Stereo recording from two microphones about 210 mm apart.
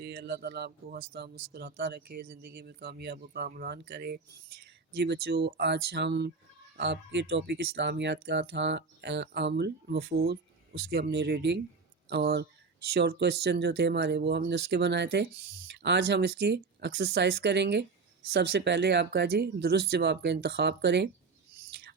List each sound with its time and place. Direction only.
0.0 s speech: 50° right (ahead or behind)
21.5 s owl: 50° right (ahead or behind)